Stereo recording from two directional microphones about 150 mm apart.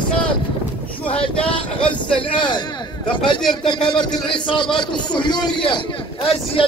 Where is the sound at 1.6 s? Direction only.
5° left (ahead or behind).